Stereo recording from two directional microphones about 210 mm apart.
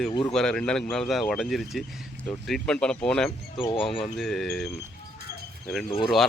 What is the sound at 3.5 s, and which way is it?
Speech, 25° left (ahead or behind).